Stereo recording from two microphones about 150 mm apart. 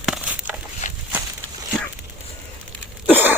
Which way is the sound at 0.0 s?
5° right (ahead or behind).